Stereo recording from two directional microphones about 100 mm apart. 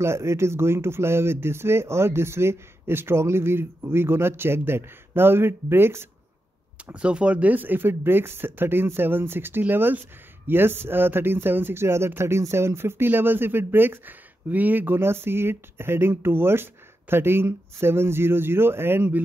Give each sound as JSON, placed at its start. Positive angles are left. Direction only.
{"t": 0.0, "sound": "speech", "side_deg": -25}
{"t": 6.9, "sound": "speech", "side_deg": -10}